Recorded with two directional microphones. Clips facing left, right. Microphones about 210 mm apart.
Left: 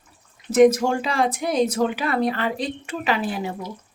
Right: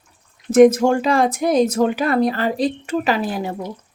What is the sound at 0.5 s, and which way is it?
Speech, 50° right (ahead or behind).